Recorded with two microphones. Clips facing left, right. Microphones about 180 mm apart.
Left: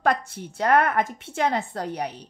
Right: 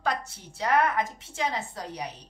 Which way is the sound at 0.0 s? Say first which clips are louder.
Left 6 dB; 55° left (ahead or behind).